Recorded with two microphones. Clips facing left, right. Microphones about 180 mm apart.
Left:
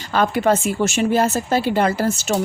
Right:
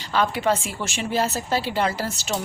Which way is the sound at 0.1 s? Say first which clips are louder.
Left 4 dB; 50° left (ahead or behind).